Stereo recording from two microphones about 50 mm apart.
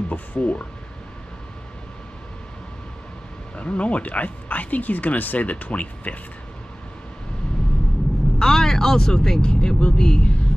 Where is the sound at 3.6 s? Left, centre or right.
Left.